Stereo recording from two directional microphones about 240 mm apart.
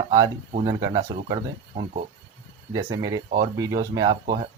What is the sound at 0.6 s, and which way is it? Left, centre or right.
Speech, centre.